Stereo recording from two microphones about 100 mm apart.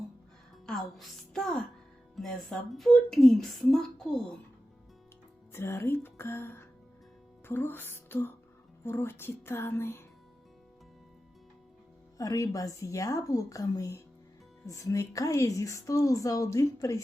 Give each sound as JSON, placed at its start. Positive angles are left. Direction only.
{"t": 0.6, "sound": "a woman's voice", "side_deg": 5}
{"t": 5.5, "sound": "speech", "side_deg": 25}
{"t": 8.8, "sound": "music", "side_deg": 25}
{"t": 12.1, "sound": "a woman's voice", "side_deg": 35}